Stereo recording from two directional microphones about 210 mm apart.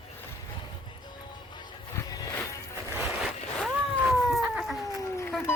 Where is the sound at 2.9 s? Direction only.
5° right (ahead or behind).